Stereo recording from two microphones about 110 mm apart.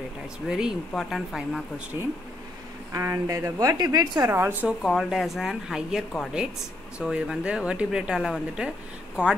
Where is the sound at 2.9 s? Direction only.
25° right (ahead or behind).